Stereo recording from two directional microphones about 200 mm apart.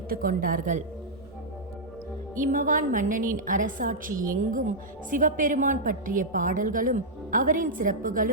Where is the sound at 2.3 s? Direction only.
40° right (ahead or behind).